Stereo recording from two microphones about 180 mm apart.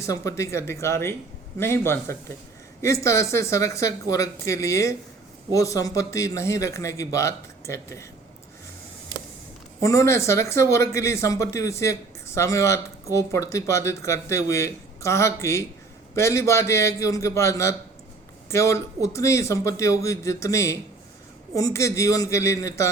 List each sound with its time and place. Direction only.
0.0 s speech: 15° left (ahead or behind)
9.8 s speech: 15° left (ahead or behind)